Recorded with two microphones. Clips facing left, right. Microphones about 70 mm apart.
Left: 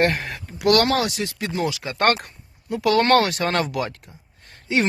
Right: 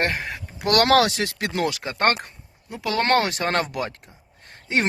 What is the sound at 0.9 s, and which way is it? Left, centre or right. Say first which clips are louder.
Speech: right 4 dB; right.